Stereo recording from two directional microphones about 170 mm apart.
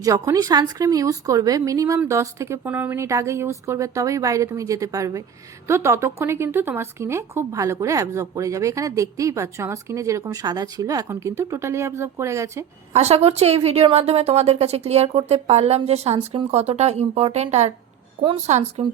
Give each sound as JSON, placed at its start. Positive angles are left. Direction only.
{"t": 0.0, "sound": "speech", "side_deg": -20}
{"t": 12.9, "sound": "a woman's voice", "side_deg": -40}
{"t": 18.2, "sound": "a woman's voice", "side_deg": -30}